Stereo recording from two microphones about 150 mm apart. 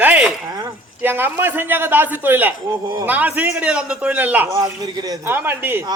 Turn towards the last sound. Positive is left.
turn(degrees=-15)  # may be behind; listen again after turning